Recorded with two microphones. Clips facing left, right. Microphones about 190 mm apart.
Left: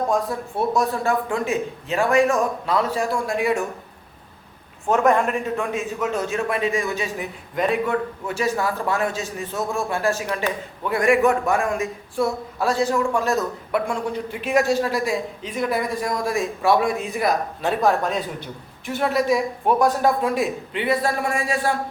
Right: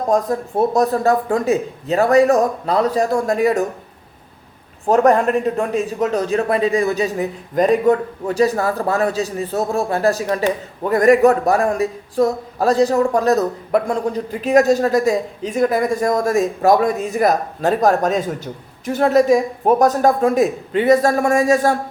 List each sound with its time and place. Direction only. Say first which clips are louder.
0.1 s a man's voice: right 5 dB; 40° right (ahead or behind)
4.9 s a man's voice: right 5 dB; 35° right (ahead or behind)